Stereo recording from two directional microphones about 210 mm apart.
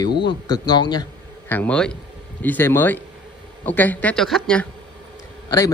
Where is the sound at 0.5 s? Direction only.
20° left (ahead or behind).